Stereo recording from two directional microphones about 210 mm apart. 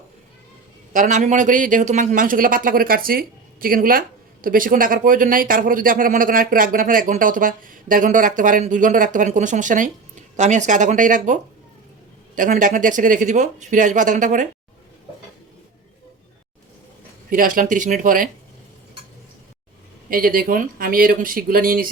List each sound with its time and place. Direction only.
0.9 s a man's voice: 35° right (ahead or behind)
12.4 s a man's voice: 40° right (ahead or behind)
17.2 s a man's voice: 40° right (ahead or behind)
20.1 s speech: 45° right (ahead or behind)